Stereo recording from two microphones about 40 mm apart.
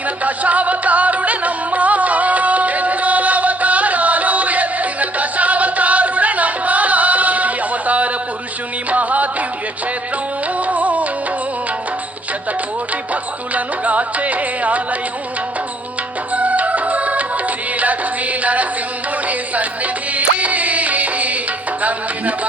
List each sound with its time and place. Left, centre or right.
0.2 s music: right
10.6 s music: right
13.5 s music: right
16.3 s music: right